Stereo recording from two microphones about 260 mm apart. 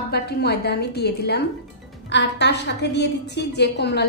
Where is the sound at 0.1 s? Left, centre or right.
Left.